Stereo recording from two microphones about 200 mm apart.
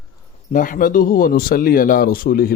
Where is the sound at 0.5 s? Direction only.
40° left (ahead or behind).